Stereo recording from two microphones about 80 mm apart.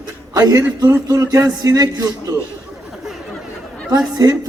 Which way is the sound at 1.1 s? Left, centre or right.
Right.